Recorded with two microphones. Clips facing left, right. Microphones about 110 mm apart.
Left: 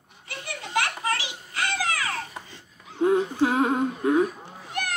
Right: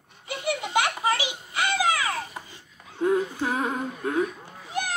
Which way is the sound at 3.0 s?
20° left (ahead or behind).